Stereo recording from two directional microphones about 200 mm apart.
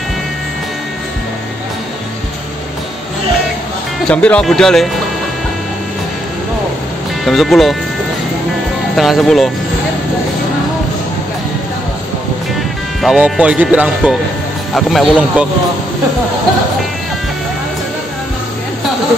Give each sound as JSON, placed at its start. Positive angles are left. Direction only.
{"t": 4.1, "sound": "speech", "side_deg": 5}
{"t": 7.2, "sound": "speech", "side_deg": 0}
{"t": 8.9, "sound": "speech", "side_deg": 0}
{"t": 13.0, "sound": "speech", "side_deg": -5}